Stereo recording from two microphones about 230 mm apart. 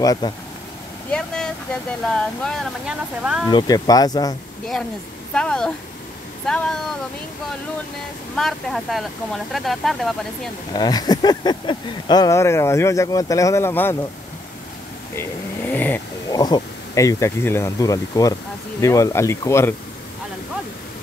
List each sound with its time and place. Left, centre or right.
0.0 s speech: centre
1.1 s speech: centre
3.4 s speech: centre
5.3 s speech: centre
8.4 s speech: centre
10.7 s speech: centre
15.1 s speech: centre